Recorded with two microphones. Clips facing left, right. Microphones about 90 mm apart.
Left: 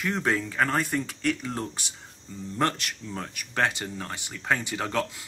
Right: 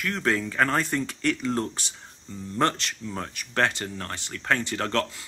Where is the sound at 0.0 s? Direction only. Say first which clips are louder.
Right 1 dB; 10° left (ahead or behind).